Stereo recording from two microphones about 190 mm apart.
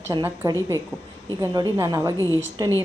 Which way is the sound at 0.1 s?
20° right (ahead or behind).